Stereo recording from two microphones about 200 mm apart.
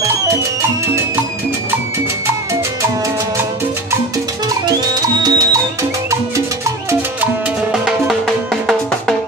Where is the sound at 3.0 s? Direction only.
15° right (ahead or behind).